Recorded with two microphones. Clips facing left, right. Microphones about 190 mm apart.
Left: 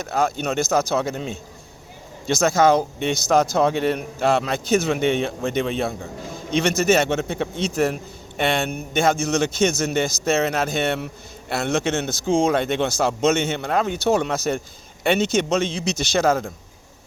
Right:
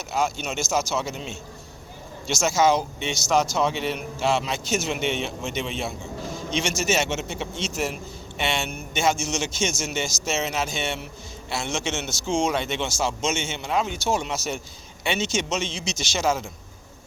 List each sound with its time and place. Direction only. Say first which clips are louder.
0.0 s speech: left 4 dB; 55° left (ahead or behind)
2.3 s speech: left 4 dB; 55° left (ahead or behind)